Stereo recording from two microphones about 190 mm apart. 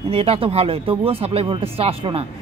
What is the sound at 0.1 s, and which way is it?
Speech, 30° right (ahead or behind).